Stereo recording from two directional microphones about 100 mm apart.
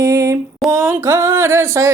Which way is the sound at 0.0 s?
30° right (ahead or behind).